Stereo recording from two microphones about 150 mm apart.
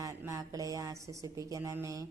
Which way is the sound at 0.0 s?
20° right (ahead or behind).